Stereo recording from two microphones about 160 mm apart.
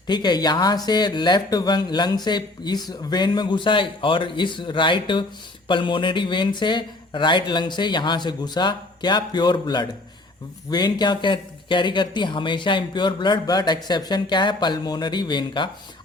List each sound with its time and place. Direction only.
0.1 s speech: 25° left (ahead or behind)